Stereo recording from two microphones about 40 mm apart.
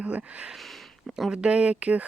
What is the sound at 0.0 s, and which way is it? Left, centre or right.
Speech, right.